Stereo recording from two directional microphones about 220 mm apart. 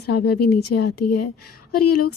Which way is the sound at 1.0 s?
90° left.